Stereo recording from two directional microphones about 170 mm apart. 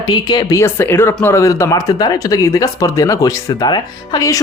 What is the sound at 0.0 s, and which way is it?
A man's voice, 25° left (ahead or behind).